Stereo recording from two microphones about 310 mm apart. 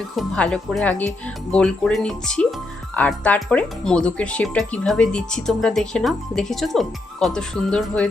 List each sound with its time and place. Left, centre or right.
0.2 s speech: centre